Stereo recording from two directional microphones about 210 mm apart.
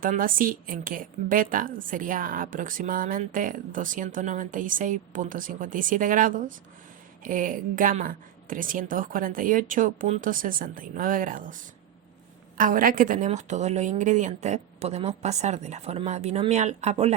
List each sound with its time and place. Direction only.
0.0 s a woman's voice: 40° right (ahead or behind)